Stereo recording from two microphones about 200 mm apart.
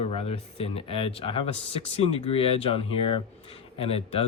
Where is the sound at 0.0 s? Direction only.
30° left (ahead or behind).